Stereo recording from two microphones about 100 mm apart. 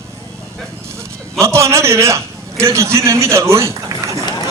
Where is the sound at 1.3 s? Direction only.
30° right (ahead or behind).